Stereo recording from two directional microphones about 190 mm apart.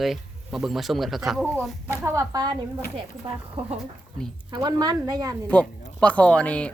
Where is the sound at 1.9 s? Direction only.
15° right (ahead or behind).